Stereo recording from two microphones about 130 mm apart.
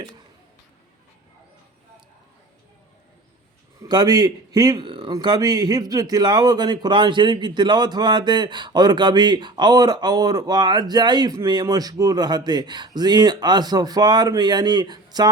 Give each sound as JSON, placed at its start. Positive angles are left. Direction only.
{"t": 3.8, "sound": "a man's voice", "side_deg": -30}